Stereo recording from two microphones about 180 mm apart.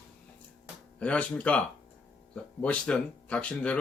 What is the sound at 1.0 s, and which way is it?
Speech, 5° left (ahead or behind).